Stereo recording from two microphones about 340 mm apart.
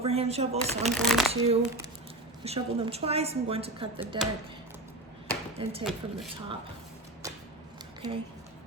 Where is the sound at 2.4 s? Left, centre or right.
Centre.